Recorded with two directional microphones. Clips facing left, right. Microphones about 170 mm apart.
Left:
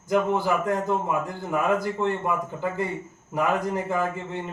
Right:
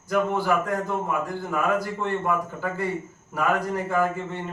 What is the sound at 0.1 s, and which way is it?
A man's voice, 20° left (ahead or behind).